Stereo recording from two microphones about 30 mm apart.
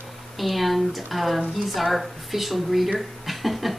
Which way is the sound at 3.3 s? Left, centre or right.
Centre.